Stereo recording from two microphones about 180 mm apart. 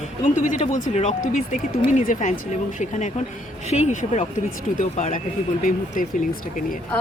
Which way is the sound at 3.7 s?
35° left (ahead or behind).